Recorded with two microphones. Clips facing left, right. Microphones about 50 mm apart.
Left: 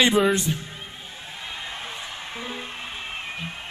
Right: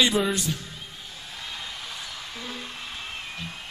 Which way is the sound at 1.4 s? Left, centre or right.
Left.